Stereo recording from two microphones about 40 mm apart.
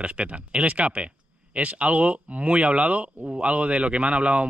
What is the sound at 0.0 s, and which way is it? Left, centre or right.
Speech, right.